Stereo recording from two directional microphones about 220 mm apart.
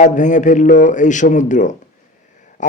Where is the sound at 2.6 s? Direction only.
35° left (ahead or behind).